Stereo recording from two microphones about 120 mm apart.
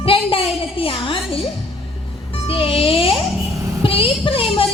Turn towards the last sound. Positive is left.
turn(degrees=50)  # may be behind; listen again after turning